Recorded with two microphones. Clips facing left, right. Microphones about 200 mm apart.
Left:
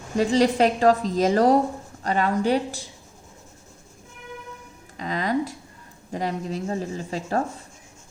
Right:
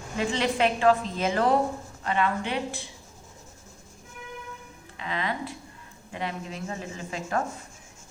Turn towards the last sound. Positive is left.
turn(degrees=35)  # may be behind; listen again after turning